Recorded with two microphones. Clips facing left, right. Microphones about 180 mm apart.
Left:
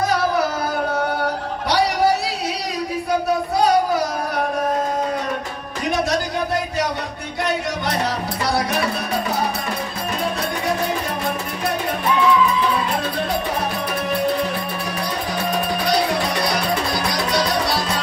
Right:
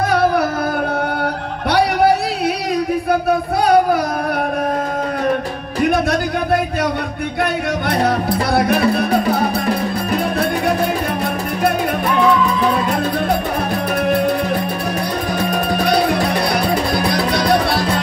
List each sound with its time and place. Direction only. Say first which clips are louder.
0.1 s music: right 4 dB; 60° right (ahead or behind)
1.7 s a sound: right 4 dB; 55° right (ahead or behind)
5.8 s music: right 5 dB; 55° right (ahead or behind)
7.9 s music: right 9 dB; 55° right (ahead or behind)
16.5 s music: right 4 dB; 55° right (ahead or behind)